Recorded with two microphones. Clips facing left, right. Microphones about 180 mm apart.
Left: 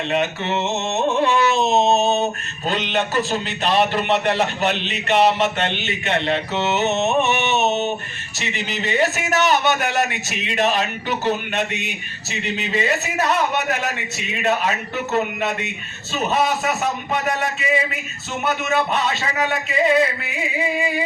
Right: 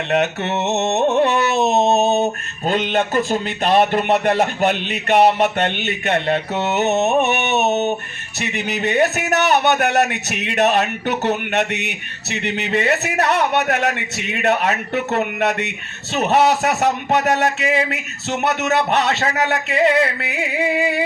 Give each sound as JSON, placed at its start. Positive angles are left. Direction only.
{"t": 0.1, "sound": "a man's voice", "side_deg": -65}
{"t": 1.2, "sound": "a sound", "side_deg": -60}
{"t": 2.6, "sound": "a man's voice", "side_deg": -50}